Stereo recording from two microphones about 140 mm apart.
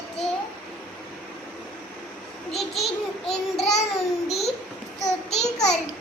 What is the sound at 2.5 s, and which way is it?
Child singing, centre (ahead or behind).